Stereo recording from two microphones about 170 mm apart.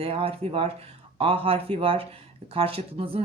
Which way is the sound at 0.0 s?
35° right (ahead or behind).